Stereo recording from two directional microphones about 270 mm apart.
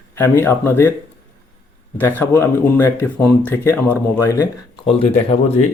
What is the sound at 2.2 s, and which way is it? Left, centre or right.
Speech, centre.